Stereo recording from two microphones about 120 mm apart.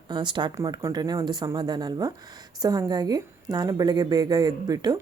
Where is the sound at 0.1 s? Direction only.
40° right (ahead or behind).